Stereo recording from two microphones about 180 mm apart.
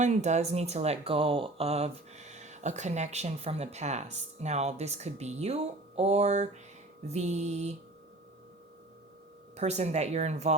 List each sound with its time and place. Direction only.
0.0 s speech: 40° right (ahead or behind)
9.6 s speech: 40° right (ahead or behind)